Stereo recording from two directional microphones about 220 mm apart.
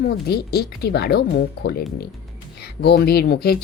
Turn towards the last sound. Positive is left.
turn(degrees=45)  # may be behind; listen again after turning